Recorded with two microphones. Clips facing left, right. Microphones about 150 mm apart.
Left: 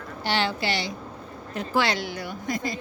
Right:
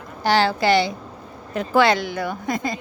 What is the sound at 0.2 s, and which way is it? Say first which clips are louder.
A woman's voice: right 7 dB; 40° right (ahead or behind).